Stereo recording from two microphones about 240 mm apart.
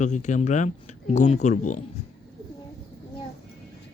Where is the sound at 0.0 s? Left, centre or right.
Left.